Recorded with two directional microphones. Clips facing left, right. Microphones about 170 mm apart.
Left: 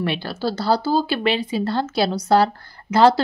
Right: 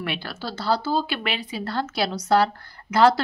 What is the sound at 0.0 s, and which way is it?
Speech, 35° left (ahead or behind).